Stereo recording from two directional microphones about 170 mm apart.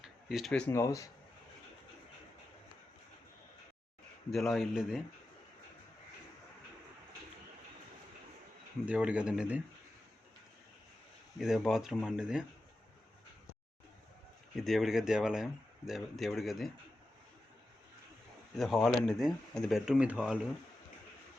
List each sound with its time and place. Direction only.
0.0 s a sound: 5° right (ahead or behind)
0.7 s speech: 20° left (ahead or behind)
4.3 s speech: centre (ahead or behind)
8.9 s speech: 5° right (ahead or behind)
11.3 s speech: centre (ahead or behind)
14.5 s speech: centre (ahead or behind)
18.5 s speech: centre (ahead or behind)